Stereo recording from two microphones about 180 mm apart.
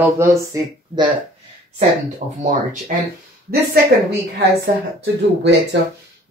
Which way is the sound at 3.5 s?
40° right (ahead or behind).